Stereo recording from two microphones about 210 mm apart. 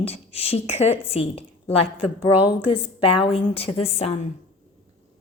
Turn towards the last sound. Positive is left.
turn(degrees=30)  # may be behind; listen again after turning